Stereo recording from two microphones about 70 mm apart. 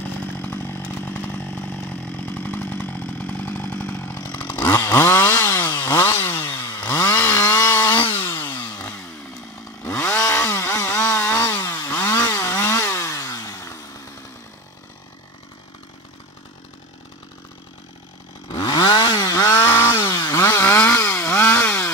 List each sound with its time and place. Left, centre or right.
0.0 s chainsaw: left
6.7 s chainsaw: left
7.0 s chainsaw: left
7.8 s chainsaw: left
10.0 s chainsaw: left
11.6 s chainsaw: left
18.5 s chainsaw: left
19.2 s chainsaw: left